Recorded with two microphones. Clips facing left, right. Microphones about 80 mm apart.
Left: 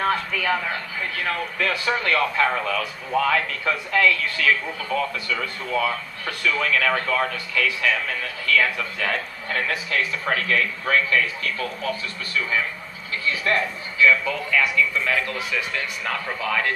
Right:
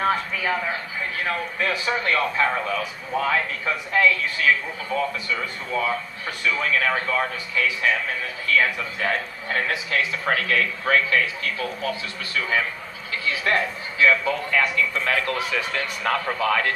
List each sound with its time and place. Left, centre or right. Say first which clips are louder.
0.0 s a man's voice: even; centre
10.3 s a man's voice: right 1 dB; right
11.4 s speech: even; left
13.4 s a man's voice: right 1 dB; right
14.8 s a man's voice: left 1 dB; right